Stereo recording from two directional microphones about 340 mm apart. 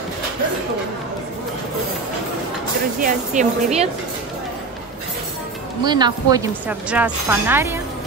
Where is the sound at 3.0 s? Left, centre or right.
Right.